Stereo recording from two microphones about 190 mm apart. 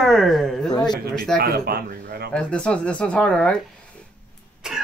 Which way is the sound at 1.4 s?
55° right (ahead or behind).